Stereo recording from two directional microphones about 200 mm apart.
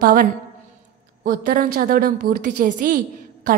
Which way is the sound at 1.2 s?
45° right (ahead or behind).